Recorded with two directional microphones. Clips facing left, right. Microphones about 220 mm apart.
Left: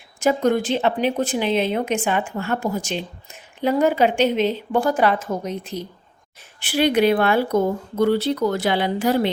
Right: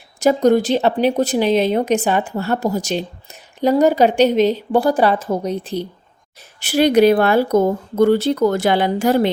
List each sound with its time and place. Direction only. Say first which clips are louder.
0.2 s speech: right 5 dB; 35° right (ahead or behind)
6.6 s speech: right 5 dB; 40° right (ahead or behind)